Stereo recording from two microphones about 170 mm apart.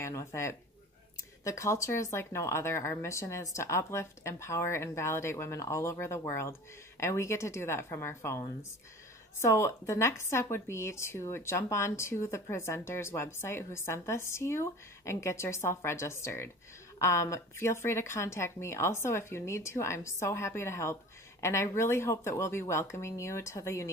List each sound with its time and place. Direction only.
0.0 s a woman's voice: 15° left (ahead or behind)